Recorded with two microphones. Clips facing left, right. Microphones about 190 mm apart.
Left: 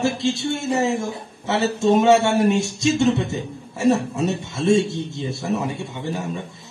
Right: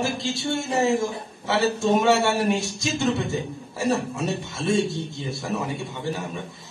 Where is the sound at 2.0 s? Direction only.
20° left (ahead or behind).